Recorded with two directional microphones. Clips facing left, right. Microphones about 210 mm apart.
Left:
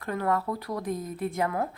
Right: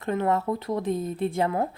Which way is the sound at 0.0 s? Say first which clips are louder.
Right 3 dB; 25° right (ahead or behind).